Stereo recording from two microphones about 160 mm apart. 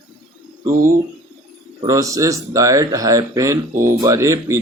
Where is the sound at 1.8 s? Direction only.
20° right (ahead or behind).